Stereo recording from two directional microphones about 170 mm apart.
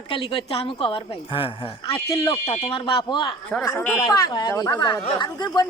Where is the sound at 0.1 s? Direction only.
30° left (ahead or behind).